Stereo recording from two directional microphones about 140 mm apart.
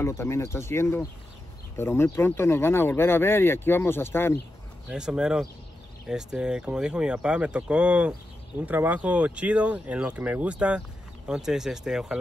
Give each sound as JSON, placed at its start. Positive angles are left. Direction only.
{"t": 0.0, "sound": "speech", "side_deg": 20}
{"t": 4.8, "sound": "speech", "side_deg": -5}